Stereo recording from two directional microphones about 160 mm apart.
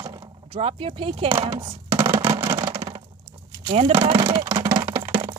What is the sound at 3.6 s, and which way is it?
Speech, 35° right (ahead or behind).